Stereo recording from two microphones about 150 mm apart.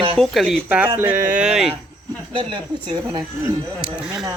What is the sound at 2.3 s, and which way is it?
Speech, 30° right (ahead or behind).